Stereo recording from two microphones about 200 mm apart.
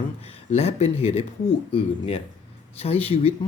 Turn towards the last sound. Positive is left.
turn(degrees=30)  # may be behind; listen again after turning